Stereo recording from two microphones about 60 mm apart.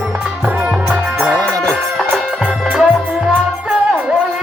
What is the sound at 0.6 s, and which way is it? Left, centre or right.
Music, centre.